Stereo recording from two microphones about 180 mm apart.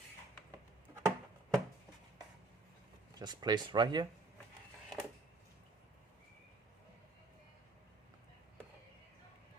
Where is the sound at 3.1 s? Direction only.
25° right (ahead or behind).